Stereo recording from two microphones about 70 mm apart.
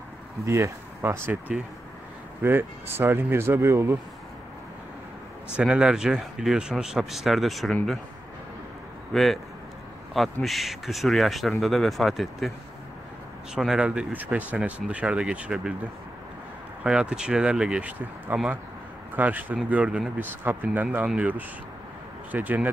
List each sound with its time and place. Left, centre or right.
0.5 s speech: right
2.4 s speech: right
5.6 s speech: centre
9.1 s speech: centre
10.4 s speech: centre
13.7 s speech: centre
16.8 s speech: centre
20.2 s speech: right